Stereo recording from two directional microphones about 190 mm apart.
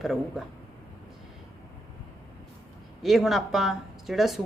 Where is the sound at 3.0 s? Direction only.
Centre (ahead or behind).